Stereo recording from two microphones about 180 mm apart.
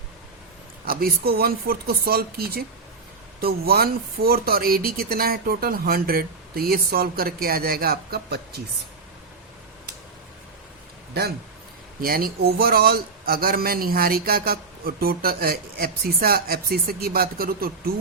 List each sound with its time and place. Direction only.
0.9 s speech: 55° right (ahead or behind)
11.2 s speech: 65° right (ahead or behind)